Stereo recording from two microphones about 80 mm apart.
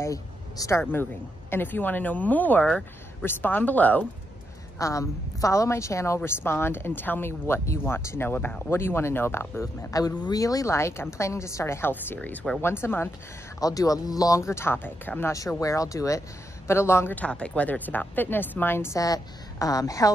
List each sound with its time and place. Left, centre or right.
0.0 s a woman's voice: left
4.7 s a woman's voice: left
8.6 s a woman's voice: left
9.8 s a woman's voice: left
13.6 s speech: left
15.3 s speech: left
16.6 s a woman's voice: left
17.1 s a woman's voice: centre
18.9 s speech: left